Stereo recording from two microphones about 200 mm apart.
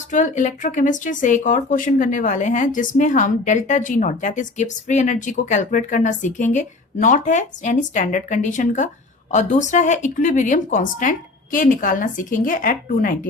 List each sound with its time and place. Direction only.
0.1 s speech: 40° left (ahead or behind)